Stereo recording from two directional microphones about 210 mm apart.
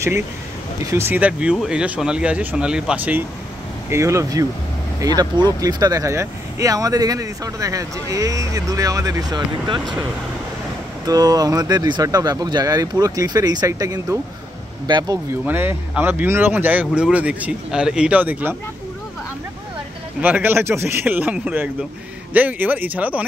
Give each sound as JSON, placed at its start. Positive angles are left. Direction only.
{"t": 0.8, "sound": "speech", "side_deg": -10}
{"t": 11.1, "sound": "speech", "side_deg": -20}
{"t": 15.4, "sound": "speech", "side_deg": -10}
{"t": 20.2, "sound": "speech", "side_deg": -10}